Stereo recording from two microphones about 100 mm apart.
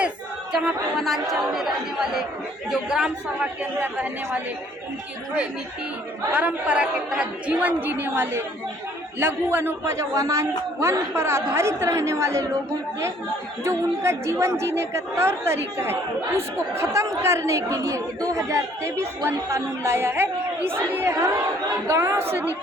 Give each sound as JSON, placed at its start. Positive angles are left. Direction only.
{"t": 0.5, "sound": "speech", "side_deg": -5}
{"t": 6.3, "sound": "speech", "side_deg": -15}
{"t": 13.7, "sound": "speech", "side_deg": -25}